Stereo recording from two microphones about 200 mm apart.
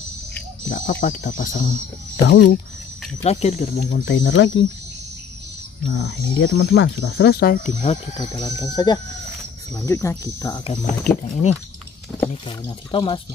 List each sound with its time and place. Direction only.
0.7 s speech: 40° left (ahead or behind)
2.2 s speech: 60° left (ahead or behind)
3.3 s speech: 35° left (ahead or behind)
4.0 s speech: 60° left (ahead or behind)
5.9 s speech: 70° left (ahead or behind)
6.6 s speech: 60° left (ahead or behind); by 7.9 s 40° left (ahead or behind)
8.4 s speech: 20° left (ahead or behind)
10.8 s speech: 35° left (ahead or behind)
12.4 s speech: 25° left (ahead or behind)